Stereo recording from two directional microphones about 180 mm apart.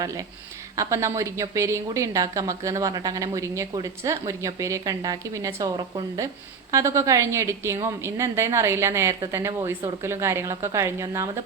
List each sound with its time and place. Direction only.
0.8 s a woman's voice: 15° right (ahead or behind)